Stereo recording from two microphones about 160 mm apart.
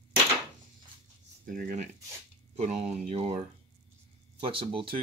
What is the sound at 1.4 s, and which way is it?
Speech, 60° right (ahead or behind).